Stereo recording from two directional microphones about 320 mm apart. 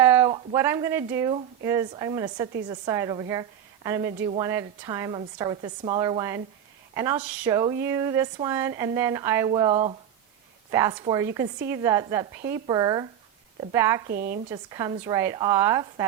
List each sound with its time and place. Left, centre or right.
0.0 s speech: centre
14.1 s speech: right
14.5 s speech: centre